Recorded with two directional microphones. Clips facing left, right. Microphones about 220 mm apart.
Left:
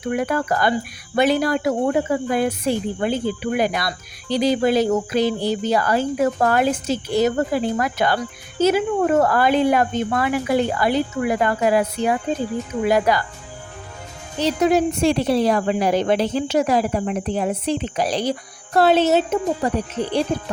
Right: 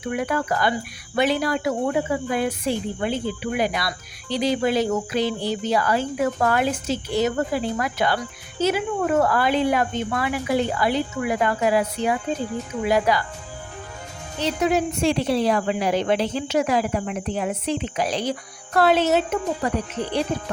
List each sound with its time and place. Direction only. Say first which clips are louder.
0.1 s a woman's voice: left 3 dB; 45° left (ahead or behind)
14.4 s a woman's voice: left 4 dB; 40° left (ahead or behind)